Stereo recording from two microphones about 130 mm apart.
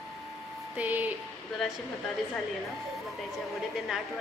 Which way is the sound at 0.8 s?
10° right (ahead or behind).